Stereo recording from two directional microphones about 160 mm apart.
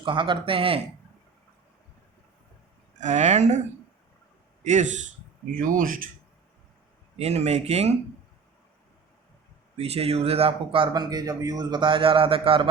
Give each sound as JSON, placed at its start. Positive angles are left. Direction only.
{"t": 0.0, "sound": "speech", "side_deg": -30}
{"t": 3.0, "sound": "speech", "side_deg": -45}
{"t": 4.6, "sound": "a man's voice", "side_deg": -45}
{"t": 7.2, "sound": "speech", "side_deg": -40}
{"t": 9.7, "sound": "speech", "side_deg": -40}